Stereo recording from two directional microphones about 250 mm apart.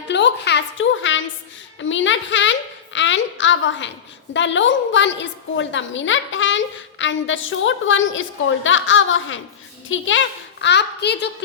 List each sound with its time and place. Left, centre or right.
0.1 s a woman's voice: left